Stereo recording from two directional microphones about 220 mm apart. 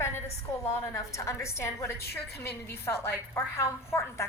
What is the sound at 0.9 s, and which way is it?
A woman's voice, 15° left (ahead or behind).